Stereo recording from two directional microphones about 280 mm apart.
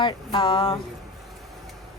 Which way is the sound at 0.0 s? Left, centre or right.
Centre.